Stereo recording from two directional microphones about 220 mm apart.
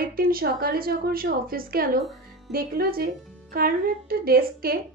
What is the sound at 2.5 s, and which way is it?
Speech, 40° right (ahead or behind).